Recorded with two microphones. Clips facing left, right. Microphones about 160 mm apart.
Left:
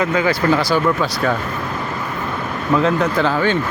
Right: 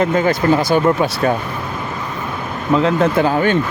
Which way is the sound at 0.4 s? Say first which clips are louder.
Right 2 dB; 25° right (ahead or behind).